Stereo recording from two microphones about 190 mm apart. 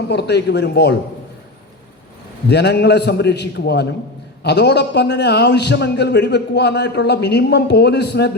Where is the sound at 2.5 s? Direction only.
60° left (ahead or behind).